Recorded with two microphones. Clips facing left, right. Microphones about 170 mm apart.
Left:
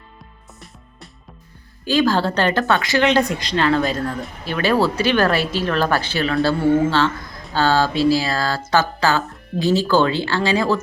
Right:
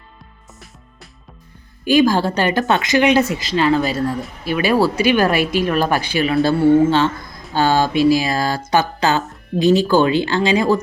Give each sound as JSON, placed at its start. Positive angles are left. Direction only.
{"t": 1.8, "sound": "speech", "side_deg": -15}